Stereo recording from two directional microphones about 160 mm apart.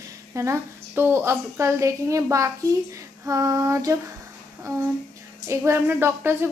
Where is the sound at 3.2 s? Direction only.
20° right (ahead or behind).